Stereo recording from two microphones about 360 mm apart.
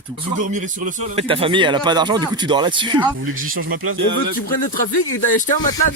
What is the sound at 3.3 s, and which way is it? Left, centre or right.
Speech, right.